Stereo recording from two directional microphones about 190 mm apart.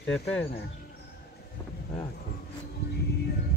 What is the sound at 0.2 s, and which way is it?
Speech, 60° left (ahead or behind).